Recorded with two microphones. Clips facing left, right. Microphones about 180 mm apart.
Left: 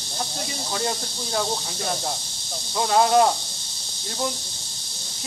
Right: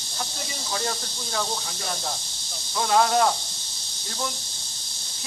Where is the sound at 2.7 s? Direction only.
25° left (ahead or behind).